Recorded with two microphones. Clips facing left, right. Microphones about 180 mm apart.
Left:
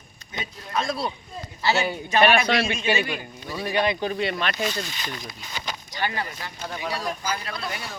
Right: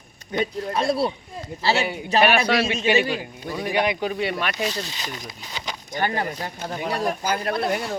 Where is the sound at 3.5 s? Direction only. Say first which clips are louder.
Right 1 dB; 15° right (ahead or behind).